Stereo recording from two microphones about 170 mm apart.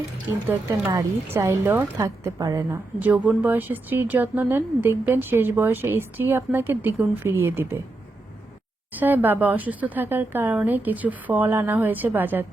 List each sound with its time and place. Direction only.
0.4 s speech: 10° right (ahead or behind)
8.9 s speech: 10° right (ahead or behind)